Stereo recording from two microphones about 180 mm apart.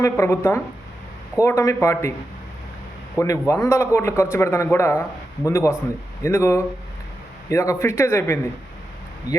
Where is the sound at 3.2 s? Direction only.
15° left (ahead or behind).